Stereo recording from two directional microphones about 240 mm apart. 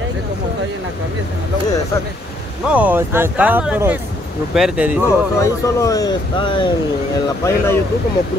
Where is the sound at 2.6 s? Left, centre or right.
Centre.